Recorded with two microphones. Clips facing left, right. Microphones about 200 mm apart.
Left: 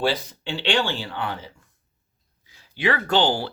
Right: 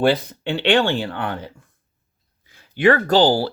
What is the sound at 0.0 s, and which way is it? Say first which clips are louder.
Speech: right 6 dB; 55° right (ahead or behind).